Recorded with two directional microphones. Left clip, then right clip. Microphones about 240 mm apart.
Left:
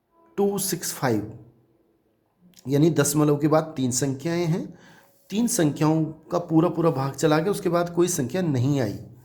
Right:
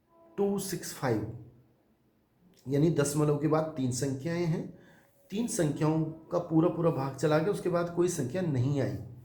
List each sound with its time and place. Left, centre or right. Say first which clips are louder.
0.3 s speech: left 7 dB; left
2.6 s speech: left 7 dB; left